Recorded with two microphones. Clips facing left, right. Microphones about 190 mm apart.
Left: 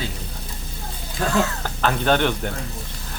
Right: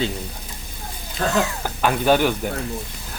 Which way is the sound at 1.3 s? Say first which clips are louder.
Left 2 dB; 15° right (ahead or behind).